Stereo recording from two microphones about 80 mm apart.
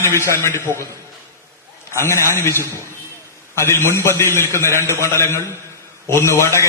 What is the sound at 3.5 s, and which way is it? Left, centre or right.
A man's voice, left.